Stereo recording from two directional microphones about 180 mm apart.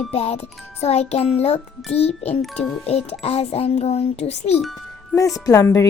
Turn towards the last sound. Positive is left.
turn(degrees=15)  # may be behind; listen again after turning